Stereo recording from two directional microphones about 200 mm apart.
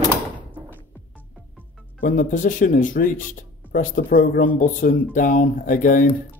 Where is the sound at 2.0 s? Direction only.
40° left (ahead or behind).